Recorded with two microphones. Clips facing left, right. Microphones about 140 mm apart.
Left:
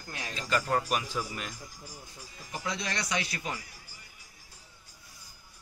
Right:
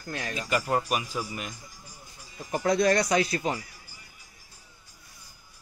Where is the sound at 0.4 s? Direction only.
10° right (ahead or behind).